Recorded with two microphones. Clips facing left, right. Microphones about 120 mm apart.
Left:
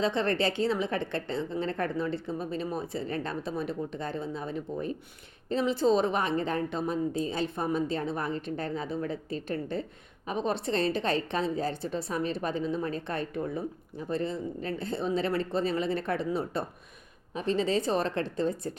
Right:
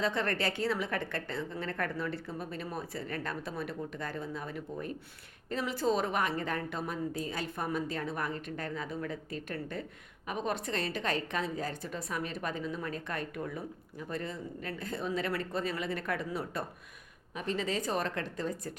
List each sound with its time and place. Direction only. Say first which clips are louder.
0.0 s a woman's voice: left 5 dB; 25° left (ahead or behind)